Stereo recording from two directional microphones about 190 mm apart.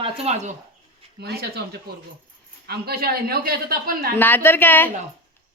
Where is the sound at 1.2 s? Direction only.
60° right (ahead or behind).